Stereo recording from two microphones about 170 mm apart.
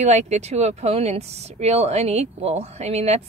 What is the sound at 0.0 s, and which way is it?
Speech, 40° right (ahead or behind).